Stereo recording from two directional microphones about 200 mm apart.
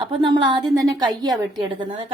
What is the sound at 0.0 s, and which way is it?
A woman's voice, 25° right (ahead or behind).